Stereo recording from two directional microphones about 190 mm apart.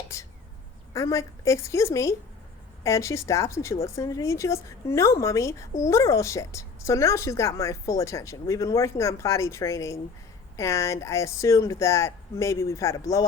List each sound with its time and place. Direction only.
0.1 s a woman's voice: 15° left (ahead or behind)